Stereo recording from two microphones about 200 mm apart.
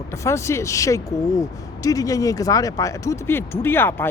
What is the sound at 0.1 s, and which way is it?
Speech, 15° left (ahead or behind).